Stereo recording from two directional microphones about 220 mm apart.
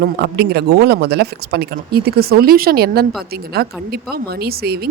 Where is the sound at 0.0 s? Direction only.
45° right (ahead or behind).